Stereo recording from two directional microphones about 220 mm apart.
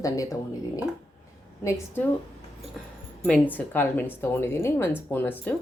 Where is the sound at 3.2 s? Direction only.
5° left (ahead or behind).